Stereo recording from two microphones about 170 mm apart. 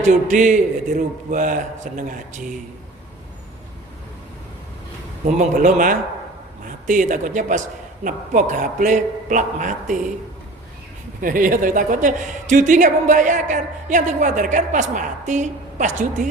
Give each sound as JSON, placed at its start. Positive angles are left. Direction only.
{"t": 0.0, "sound": "a woman's voice", "side_deg": -50}
{"t": 5.2, "sound": "a woman's voice", "side_deg": -45}
{"t": 11.2, "sound": "a woman's voice", "side_deg": -55}